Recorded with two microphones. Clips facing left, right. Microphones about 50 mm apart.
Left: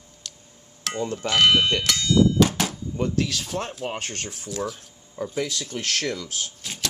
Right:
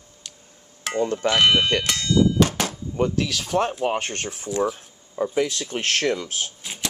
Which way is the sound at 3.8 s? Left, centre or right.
Right.